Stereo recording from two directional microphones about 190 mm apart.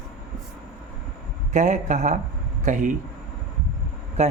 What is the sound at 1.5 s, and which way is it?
A man's voice, 40° right (ahead or behind).